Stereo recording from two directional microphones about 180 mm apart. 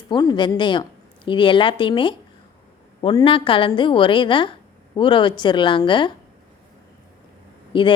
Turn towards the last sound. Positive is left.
turn(degrees=25)  # may be behind; listen again after turning